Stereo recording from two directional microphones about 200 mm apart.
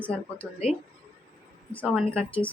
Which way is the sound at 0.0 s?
5° left (ahead or behind).